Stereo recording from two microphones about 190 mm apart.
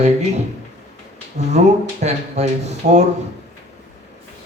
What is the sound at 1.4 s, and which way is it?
A man's voice, 35° right (ahead or behind).